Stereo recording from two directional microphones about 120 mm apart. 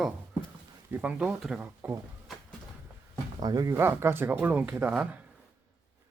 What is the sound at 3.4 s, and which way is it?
Speech, 30° right (ahead or behind).